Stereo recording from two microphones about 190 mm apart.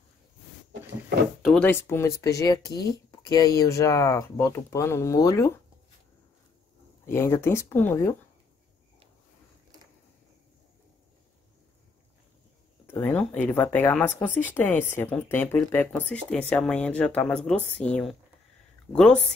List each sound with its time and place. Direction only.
1.4 s speech: 5° left (ahead or behind)
7.1 s speech: 15° left (ahead or behind)
12.8 s speech: 10° left (ahead or behind)